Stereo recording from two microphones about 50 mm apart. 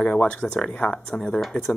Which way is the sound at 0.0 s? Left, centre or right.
Centre.